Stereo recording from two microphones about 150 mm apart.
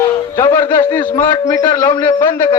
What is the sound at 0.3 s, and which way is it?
A man's voice, 20° left (ahead or behind).